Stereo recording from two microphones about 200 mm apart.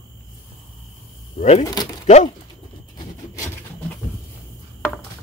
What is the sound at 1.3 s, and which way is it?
Speech, 35° left (ahead or behind).